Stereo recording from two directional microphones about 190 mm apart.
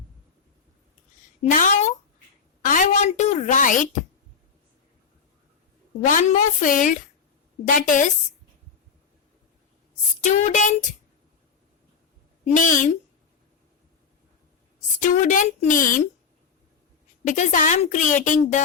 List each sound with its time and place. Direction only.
1.4 s a woman's voice: 40° left (ahead or behind)
6.0 s a woman's voice: 45° left (ahead or behind)
10.2 s a woman's voice: 40° left (ahead or behind)
12.5 s a woman's voice: 45° left (ahead or behind)
15.0 s a woman's voice: 40° left (ahead or behind)
17.2 s a woman's voice: 40° left (ahead or behind)